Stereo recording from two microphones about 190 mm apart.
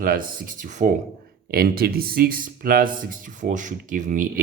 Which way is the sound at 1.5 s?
50° right (ahead or behind).